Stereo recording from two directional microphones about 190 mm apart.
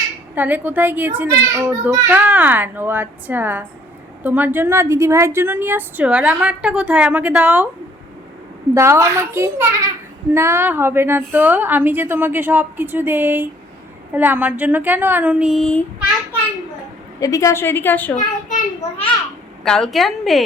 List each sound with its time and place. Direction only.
0.3 s a woman's voice: 10° right (ahead or behind)
8.7 s a woman's voice: 15° right (ahead or behind); by 15.8 s centre (ahead or behind)
17.2 s a woman's voice: 20° left (ahead or behind)
18.8 s a child's voice: 30° left (ahead or behind)
19.6 s a woman's voice: 5° left (ahead or behind)